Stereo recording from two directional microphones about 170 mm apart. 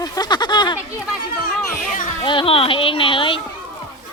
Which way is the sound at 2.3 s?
30° left (ahead or behind).